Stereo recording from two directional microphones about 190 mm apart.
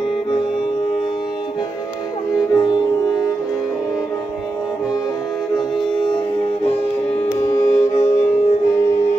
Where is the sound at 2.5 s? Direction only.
20° left (ahead or behind).